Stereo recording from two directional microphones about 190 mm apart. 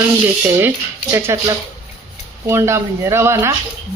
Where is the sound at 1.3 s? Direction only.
15° right (ahead or behind).